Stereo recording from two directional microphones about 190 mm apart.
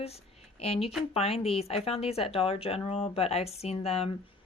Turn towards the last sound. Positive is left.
turn(degrees=30)  # may be behind; listen again after turning